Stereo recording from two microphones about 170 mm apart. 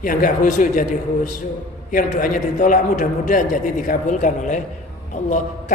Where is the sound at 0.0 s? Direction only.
50° left (ahead or behind).